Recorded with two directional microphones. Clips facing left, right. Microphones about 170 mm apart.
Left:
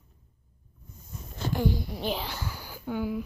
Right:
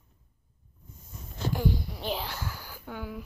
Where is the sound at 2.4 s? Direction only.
15° left (ahead or behind).